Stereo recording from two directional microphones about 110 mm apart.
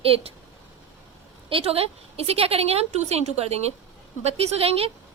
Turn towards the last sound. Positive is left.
turn(degrees=-60)  # may be behind; listen again after turning